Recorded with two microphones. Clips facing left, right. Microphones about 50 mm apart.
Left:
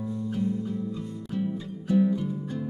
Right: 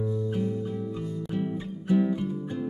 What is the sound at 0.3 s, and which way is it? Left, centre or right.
Music, right.